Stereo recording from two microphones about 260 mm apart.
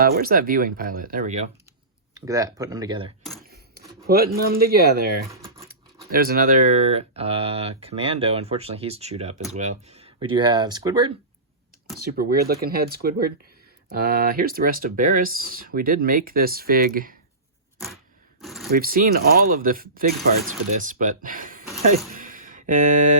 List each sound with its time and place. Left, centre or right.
0.0 s speech: right
2.1 s speech: centre
4.0 s speech: right
5.3 s a sound: centre
6.1 s speech: right; by 11.1 s centre
11.9 s speech: right
18.3 s a sound: centre
18.7 s speech: right
22.1 s a sound: right